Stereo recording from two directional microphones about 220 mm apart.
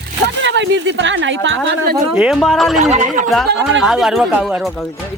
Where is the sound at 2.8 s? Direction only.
35° right (ahead or behind).